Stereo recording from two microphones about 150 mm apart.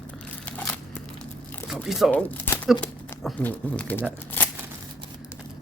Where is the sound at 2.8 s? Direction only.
10° left (ahead or behind).